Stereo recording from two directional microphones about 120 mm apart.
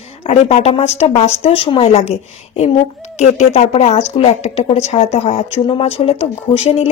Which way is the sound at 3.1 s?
70° left (ahead or behind).